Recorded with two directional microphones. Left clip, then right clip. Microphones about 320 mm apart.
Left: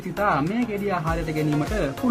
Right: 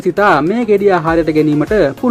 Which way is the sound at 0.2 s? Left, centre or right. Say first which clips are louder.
Right 10 dB; right.